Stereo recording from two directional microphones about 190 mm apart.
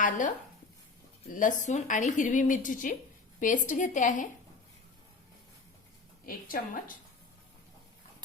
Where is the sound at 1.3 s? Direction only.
40° left (ahead or behind).